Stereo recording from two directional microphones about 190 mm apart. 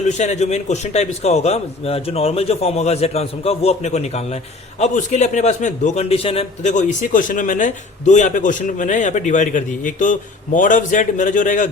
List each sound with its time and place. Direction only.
0.2 s a man's voice: 35° left (ahead or behind)